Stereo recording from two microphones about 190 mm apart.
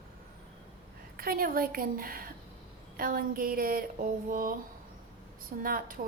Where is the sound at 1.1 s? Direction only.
50° right (ahead or behind).